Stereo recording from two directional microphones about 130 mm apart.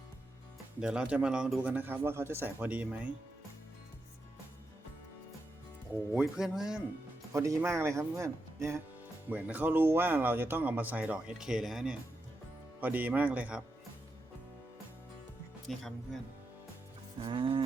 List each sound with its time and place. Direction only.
0.8 s speech: 5° right (ahead or behind)
6.1 s a man's voice: 5° right (ahead or behind)
7.3 s speech: 25° right (ahead or behind)
15.7 s a man's voice: centre (ahead or behind)
17.2 s speech: 40° right (ahead or behind)